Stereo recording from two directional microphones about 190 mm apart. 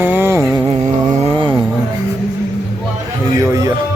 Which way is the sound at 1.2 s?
25° right (ahead or behind).